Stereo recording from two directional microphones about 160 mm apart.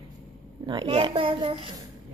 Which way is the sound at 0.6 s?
30° right (ahead or behind).